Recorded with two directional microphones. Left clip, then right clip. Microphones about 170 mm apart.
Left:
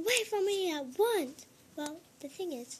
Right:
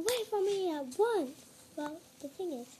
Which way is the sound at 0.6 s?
40° left (ahead or behind).